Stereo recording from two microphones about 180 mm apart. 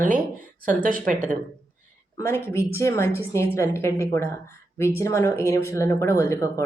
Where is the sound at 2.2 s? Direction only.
15° left (ahead or behind).